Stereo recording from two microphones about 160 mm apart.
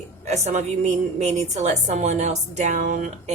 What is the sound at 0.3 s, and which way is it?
A woman's voice, 45° right (ahead or behind).